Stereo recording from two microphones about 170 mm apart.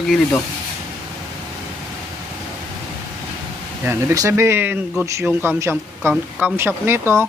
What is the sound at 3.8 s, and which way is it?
Speech, 15° right (ahead or behind).